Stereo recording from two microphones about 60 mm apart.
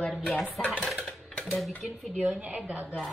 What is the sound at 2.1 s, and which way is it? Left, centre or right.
Speech, right.